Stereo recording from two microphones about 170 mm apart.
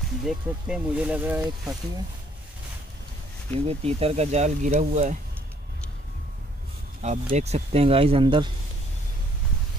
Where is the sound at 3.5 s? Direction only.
35° right (ahead or behind).